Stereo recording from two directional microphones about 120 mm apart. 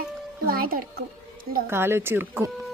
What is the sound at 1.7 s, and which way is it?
Speech, 20° right (ahead or behind).